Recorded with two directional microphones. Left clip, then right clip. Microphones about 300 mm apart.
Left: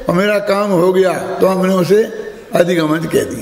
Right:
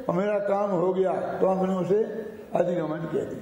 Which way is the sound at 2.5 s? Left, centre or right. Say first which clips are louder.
Left 13 dB; left.